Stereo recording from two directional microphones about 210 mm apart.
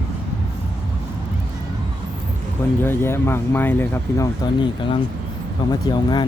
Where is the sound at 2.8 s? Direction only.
10° left (ahead or behind).